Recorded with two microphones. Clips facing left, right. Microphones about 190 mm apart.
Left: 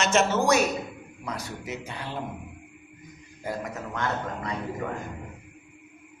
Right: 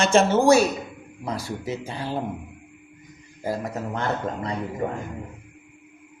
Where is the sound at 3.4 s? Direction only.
30° right (ahead or behind).